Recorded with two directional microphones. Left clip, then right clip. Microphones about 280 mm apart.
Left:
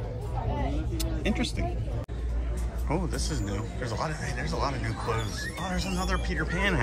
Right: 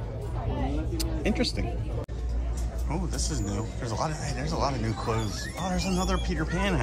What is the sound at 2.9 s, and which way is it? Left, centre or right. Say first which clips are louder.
A man's voice: left 2 dB; centre.